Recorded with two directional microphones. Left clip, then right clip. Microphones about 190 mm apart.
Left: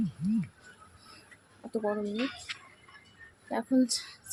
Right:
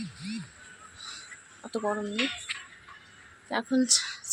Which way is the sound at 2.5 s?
20° right (ahead or behind).